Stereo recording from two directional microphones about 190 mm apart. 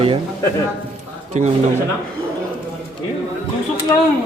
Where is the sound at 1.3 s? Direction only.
40° right (ahead or behind).